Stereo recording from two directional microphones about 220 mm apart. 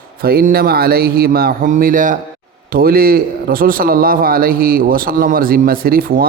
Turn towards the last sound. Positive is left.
turn(degrees=-40)  # may be behind; listen again after turning